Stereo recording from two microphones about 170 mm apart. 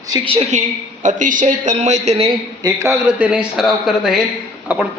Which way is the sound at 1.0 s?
50° right (ahead or behind).